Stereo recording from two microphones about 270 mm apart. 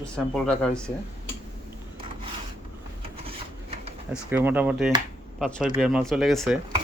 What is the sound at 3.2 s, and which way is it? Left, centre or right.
Rub, right.